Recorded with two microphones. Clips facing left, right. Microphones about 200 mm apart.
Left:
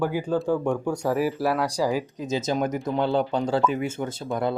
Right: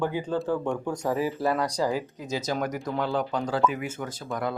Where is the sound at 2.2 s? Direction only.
20° left (ahead or behind).